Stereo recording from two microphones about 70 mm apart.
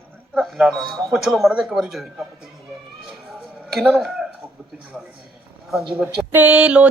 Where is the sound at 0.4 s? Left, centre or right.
Centre.